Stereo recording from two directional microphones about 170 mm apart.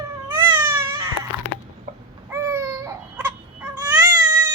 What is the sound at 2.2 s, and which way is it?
Babbling, 20° right (ahead or behind).